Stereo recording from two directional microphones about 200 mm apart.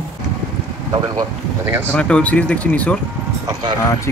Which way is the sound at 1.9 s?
5° left (ahead or behind).